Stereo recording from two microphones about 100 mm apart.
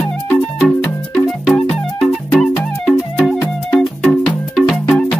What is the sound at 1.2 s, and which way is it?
Music, centre (ahead or behind).